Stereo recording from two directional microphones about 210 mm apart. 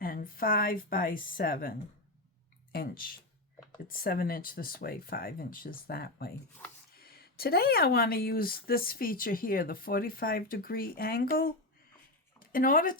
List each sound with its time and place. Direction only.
0.0 s speech: 45° left (ahead or behind)